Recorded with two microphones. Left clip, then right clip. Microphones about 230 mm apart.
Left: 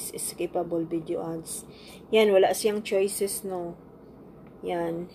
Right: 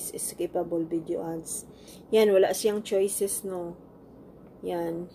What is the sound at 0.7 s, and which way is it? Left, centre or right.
Speech, centre.